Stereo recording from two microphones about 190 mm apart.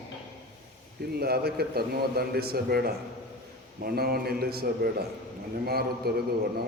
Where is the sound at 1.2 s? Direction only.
55° right (ahead or behind).